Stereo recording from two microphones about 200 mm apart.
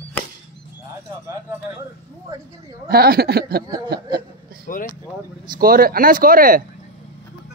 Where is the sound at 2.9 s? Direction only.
50° right (ahead or behind).